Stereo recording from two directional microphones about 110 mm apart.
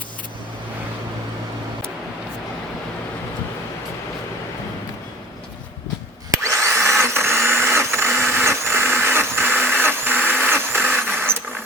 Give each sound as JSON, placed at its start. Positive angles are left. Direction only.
{"t": 6.3, "sound": "vacuum cleaner", "side_deg": -25}